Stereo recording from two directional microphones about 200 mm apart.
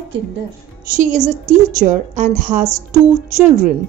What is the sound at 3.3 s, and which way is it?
Speech, 15° right (ahead or behind).